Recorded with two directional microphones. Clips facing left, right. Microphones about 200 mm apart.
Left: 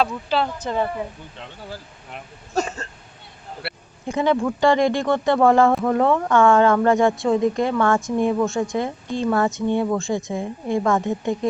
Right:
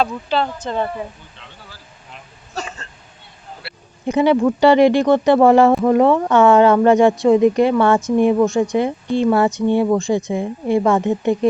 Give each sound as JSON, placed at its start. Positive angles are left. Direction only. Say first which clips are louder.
{"t": 0.0, "sound": "a woman's voice", "louder": "right 2 dB", "side_deg": 5}
{"t": 3.6, "sound": "a sound", "louder": "left 9 dB", "side_deg": 60}
{"t": 4.0, "sound": "a woman's voice", "louder": "right 6 dB", "side_deg": -15}